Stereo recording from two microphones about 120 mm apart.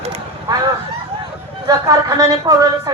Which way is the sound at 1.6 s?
30° right (ahead or behind).